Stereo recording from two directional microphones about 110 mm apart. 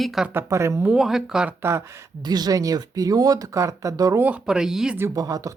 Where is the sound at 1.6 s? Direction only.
20° right (ahead or behind).